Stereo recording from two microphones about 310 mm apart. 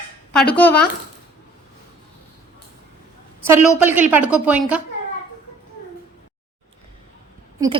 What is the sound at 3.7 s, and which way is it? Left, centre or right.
Speech, centre.